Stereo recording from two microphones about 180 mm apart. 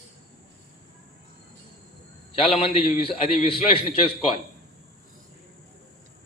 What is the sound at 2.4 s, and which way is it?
A man's voice, 35° left (ahead or behind).